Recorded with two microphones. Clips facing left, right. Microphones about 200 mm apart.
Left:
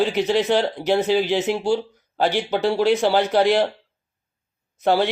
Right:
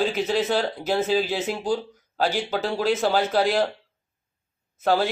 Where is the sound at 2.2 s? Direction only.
20° left (ahead or behind).